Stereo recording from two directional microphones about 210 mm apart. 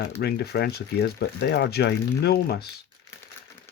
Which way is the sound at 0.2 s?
50° left (ahead or behind).